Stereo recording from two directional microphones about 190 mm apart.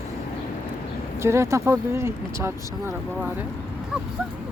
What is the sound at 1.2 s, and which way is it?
Speech, 15° right (ahead or behind).